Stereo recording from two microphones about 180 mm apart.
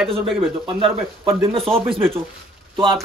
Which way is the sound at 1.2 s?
25° right (ahead or behind).